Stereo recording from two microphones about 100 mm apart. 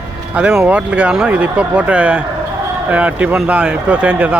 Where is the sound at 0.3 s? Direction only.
10° right (ahead or behind).